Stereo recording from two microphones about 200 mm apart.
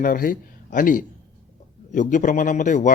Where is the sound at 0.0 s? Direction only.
45° left (ahead or behind).